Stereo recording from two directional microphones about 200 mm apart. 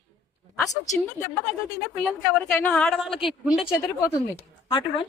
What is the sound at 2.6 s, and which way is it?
A woman's voice, 5° left (ahead or behind).